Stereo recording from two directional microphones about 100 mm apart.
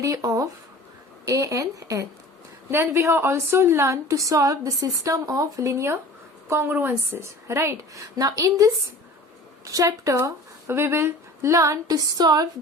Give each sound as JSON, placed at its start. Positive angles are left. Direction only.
{"t": 0.0, "sound": "a woman's voice", "side_deg": -35}
{"t": 9.7, "sound": "a woman's voice", "side_deg": -35}